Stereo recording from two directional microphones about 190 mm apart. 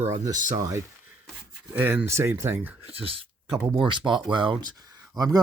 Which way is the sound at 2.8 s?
30° right (ahead or behind).